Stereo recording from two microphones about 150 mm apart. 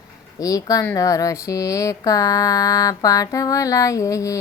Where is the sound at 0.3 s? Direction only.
25° left (ahead or behind).